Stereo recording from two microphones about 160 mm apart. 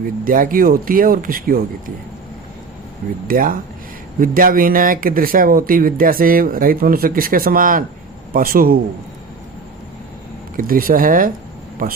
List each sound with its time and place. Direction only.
0.0 s speech: 60° right (ahead or behind)
3.2 s speech: 60° right (ahead or behind)
10.6 s speech: 60° right (ahead or behind)